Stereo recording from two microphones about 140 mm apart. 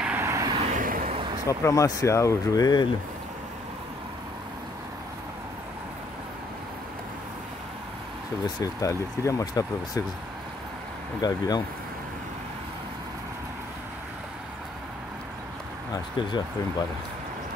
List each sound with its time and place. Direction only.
0.0 s vehicle: 15° right (ahead or behind)
0.5 s vehicle: 45° right (ahead or behind)
0.7 s a sound: 75° right (ahead or behind)
1.5 s speech: 25° left (ahead or behind)
8.5 s speech: 25° left (ahead or behind)
11.1 s speech: 30° left (ahead or behind)
16.2 s speech: 35° left (ahead or behind)